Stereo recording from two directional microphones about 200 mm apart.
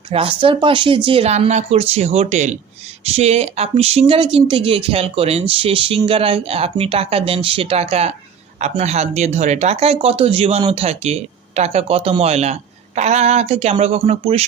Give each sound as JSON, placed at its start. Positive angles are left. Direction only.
{"t": 0.1, "sound": "speech", "side_deg": -25}